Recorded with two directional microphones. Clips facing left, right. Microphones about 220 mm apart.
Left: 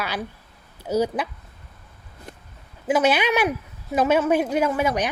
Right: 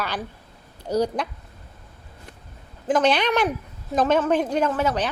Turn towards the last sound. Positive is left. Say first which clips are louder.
# left 1 dB
turn(degrees=10)  # may be behind; listen again after turning